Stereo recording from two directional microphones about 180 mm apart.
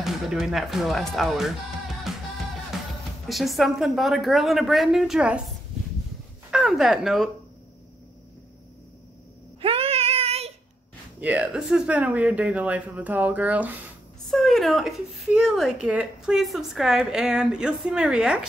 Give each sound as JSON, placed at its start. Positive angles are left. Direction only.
{"t": 0.0, "sound": "speech", "side_deg": 0}
{"t": 3.3, "sound": "speech", "side_deg": 0}
{"t": 6.5, "sound": "speech", "side_deg": 0}
{"t": 9.6, "sound": "child singing", "side_deg": -30}
{"t": 11.1, "sound": "speech", "side_deg": -10}